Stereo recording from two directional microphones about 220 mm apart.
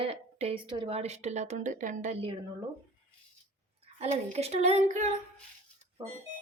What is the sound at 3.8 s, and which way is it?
A woman's voice, 30° right (ahead or behind).